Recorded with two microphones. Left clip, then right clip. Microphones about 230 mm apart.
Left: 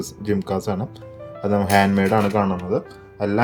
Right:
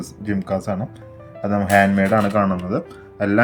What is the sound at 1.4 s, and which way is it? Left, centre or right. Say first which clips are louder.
Speech: left 1 dB; left.